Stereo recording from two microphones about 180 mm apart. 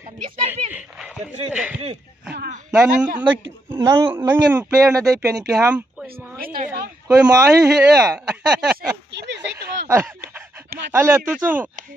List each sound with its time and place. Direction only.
0.5 s a sound: 10° right (ahead or behind)
1.5 s a man's voice: 10° right (ahead or behind)
6.4 s speech: 50° right (ahead or behind)
7.2 s speech: 5° right (ahead or behind)
9.8 s a man's voice: 15° right (ahead or behind)